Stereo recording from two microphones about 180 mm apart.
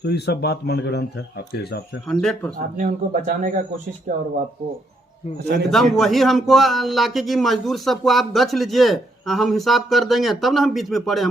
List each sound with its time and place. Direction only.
0.0 s speech: 65° left (ahead or behind)
2.0 s speech: 5° left (ahead or behind)
2.6 s speech: 45° right (ahead or behind)
5.7 s speech: centre (ahead or behind)